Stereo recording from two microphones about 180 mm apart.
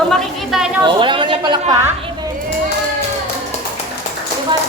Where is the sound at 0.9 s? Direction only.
25° right (ahead or behind).